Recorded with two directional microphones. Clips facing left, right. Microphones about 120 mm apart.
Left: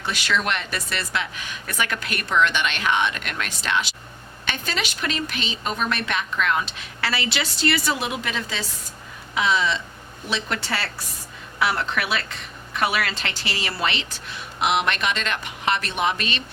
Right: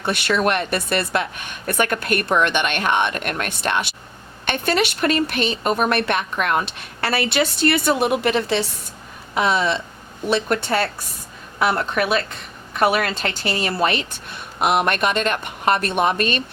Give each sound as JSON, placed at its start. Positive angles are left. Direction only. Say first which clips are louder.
{"t": 0.0, "sound": "speech", "louder": "right 5 dB", "side_deg": -55}